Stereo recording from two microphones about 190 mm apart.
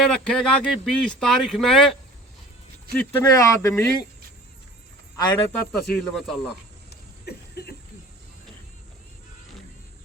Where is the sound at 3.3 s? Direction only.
15° left (ahead or behind).